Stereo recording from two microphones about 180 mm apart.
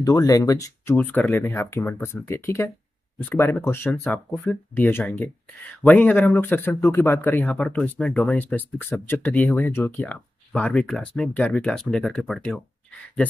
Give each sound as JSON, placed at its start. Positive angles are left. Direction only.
{"t": 0.0, "sound": "speech", "side_deg": 20}